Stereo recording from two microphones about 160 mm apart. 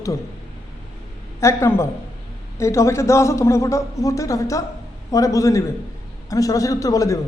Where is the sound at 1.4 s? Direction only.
15° left (ahead or behind).